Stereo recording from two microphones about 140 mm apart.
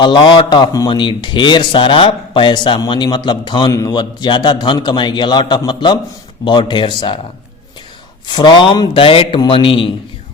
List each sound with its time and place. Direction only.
0.0 s speech: 35° left (ahead or behind)
8.3 s speech: 30° left (ahead or behind)